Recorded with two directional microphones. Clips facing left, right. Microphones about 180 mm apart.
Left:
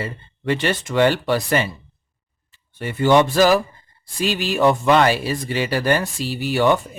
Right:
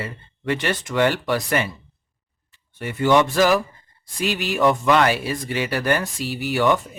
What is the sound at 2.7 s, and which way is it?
Speech, 30° left (ahead or behind).